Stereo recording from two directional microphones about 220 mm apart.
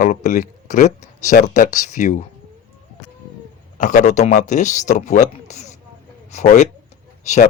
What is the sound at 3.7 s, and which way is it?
Speech, 35° left (ahead or behind).